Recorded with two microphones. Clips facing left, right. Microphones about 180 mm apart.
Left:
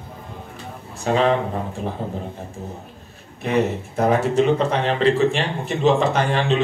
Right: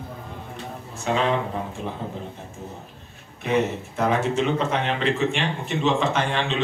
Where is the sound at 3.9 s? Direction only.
40° left (ahead or behind).